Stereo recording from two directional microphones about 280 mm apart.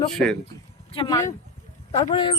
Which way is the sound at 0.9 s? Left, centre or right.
Centre.